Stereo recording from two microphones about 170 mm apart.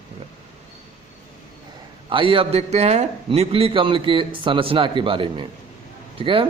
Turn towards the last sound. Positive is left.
turn(degrees=-30)  # may be behind; listen again after turning